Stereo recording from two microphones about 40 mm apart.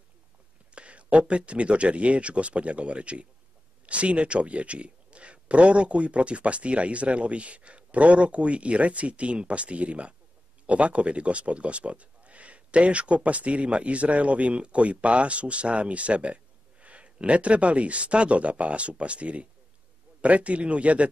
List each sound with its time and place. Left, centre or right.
0.7 s speech: right